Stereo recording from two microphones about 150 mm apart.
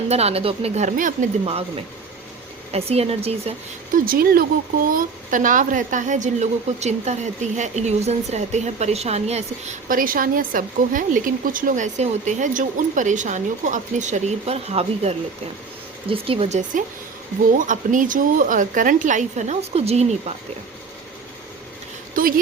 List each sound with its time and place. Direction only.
0.1 s a woman's voice: 45° right (ahead or behind); by 1.3 s 60° right (ahead or behind)
1.5 s a woman's voice: 40° right (ahead or behind)
3.9 s speech: 75° right (ahead or behind)
4.9 s a woman's voice: 65° right (ahead or behind); by 9.7 s 45° right (ahead or behind)
9.9 s a woman's voice: 70° right (ahead or behind); by 20.3 s 45° right (ahead or behind)
22.1 s speech: 70° right (ahead or behind)